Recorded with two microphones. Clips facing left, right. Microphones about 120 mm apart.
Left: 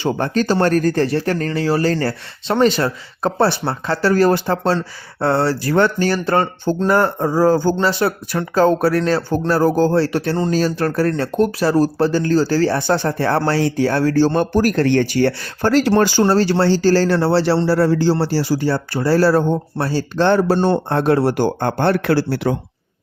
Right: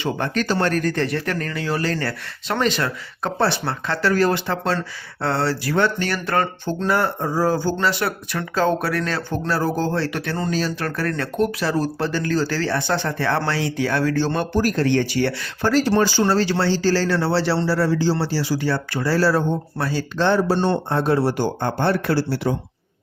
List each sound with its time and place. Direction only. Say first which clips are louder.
0.0 s speech: left 5 dB; 35° left (ahead or behind)
6.7 s speech: left 4 dB; 45° left (ahead or behind)
7.8 s speech: left 4 dB; 35° left (ahead or behind)
10.5 s speech: left 6 dB; 40° left (ahead or behind)
15.7 s speech: left 4 dB; 60° left (ahead or behind)
16.2 s speech: left 4 dB; 40° left (ahead or behind)
20.1 s speech: left 4 dB; 55° left (ahead or behind)
21.0 s speech: left 4 dB; 60° left (ahead or behind)